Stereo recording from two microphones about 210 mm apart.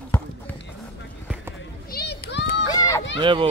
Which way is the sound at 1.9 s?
50° left (ahead or behind).